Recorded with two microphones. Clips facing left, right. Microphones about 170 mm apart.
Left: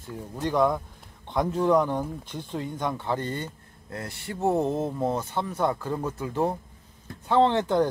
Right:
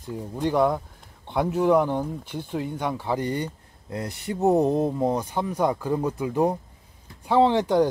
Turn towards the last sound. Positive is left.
turn(degrees=-10)  # may be behind; listen again after turning